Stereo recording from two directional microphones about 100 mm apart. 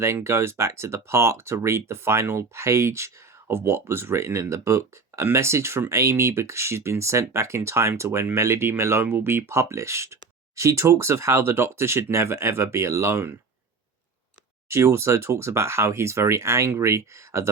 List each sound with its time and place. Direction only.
0.0 s speech: 25° right (ahead or behind)
14.7 s speech: 30° right (ahead or behind)